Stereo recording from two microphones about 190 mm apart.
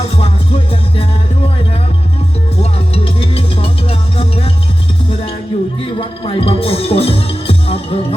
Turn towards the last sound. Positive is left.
turn(degrees=30)  # may be behind; listen again after turning